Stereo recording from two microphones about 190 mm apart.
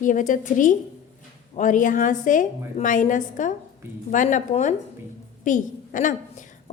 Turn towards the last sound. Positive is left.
turn(degrees=40)  # may be behind; listen again after turning